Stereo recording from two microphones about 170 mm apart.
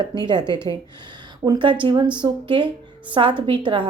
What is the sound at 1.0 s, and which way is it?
Speech, 25° right (ahead or behind).